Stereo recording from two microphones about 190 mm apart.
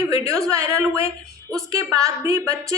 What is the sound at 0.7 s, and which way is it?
A woman's voice, 15° right (ahead or behind).